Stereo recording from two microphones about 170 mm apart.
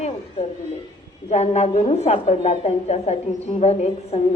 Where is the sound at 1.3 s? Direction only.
40° left (ahead or behind).